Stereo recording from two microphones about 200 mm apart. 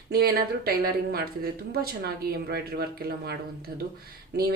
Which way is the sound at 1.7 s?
50° right (ahead or behind).